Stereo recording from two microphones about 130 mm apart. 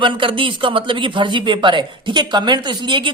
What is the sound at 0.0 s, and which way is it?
Speech, 40° right (ahead or behind).